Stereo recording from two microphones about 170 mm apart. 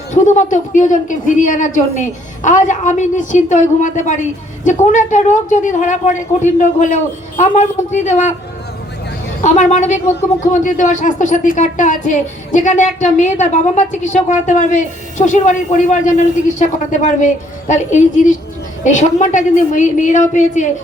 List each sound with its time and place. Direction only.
0.1 s speech: 45° left (ahead or behind)
9.4 s speech: 45° left (ahead or behind)